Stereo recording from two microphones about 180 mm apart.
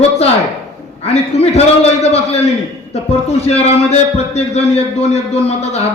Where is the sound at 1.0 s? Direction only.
35° left (ahead or behind).